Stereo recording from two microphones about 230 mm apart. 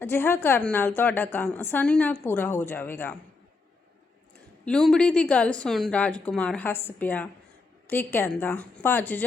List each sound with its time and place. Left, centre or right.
0.0 s a woman's voice: centre
4.6 s a woman's voice: centre